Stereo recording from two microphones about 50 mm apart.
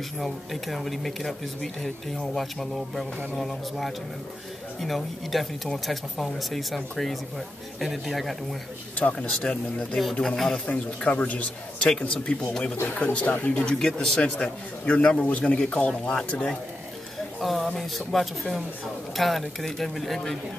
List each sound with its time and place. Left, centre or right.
0.2 s speech: centre
8.9 s a man's voice: left
10.2 s speech: centre
10.7 s a man's voice: left
13.5 s a man's voice: centre
17.4 s speech: centre